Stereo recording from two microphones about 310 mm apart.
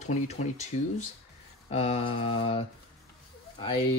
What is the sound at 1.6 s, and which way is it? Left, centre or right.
Speech, centre.